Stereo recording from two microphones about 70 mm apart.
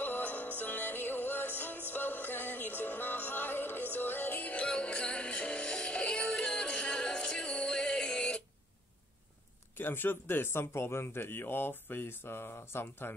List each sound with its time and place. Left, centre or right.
0.0 s music: left; by 8.5 s centre
9.8 s speech: left